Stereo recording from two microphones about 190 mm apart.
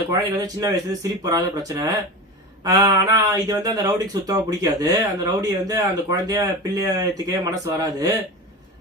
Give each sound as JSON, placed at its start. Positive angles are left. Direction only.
{"t": 0.1, "sound": "speech", "side_deg": -20}